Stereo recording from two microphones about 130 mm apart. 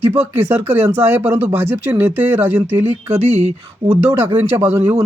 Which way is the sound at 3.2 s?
55° right (ahead or behind).